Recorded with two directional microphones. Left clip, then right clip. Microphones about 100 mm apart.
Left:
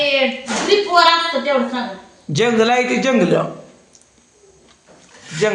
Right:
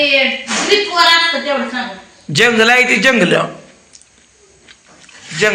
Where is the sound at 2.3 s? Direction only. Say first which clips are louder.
Right 5 dB; 10° left (ahead or behind).